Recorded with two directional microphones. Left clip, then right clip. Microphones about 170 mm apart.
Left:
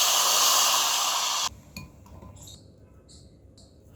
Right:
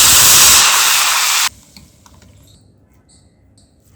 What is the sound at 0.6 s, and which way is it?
Hiss, 70° right (ahead or behind).